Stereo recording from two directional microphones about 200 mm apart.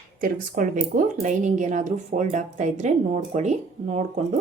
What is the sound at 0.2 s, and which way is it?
Speech, 45° right (ahead or behind).